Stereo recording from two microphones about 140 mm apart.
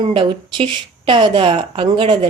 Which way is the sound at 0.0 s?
35° right (ahead or behind).